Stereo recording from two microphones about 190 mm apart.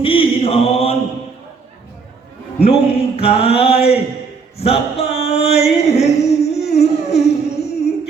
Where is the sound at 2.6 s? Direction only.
30° left (ahead or behind).